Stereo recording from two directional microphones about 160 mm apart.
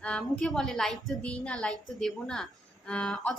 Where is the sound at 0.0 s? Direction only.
5° left (ahead or behind).